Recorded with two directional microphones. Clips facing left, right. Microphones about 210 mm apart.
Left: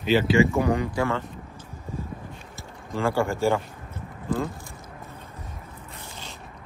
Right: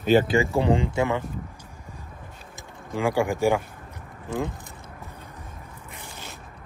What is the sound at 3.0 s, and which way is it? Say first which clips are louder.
Speech: right 1 dB; 15° right (ahead or behind).